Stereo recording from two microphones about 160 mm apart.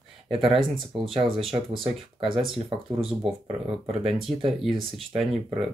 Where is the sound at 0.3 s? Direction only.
35° right (ahead or behind).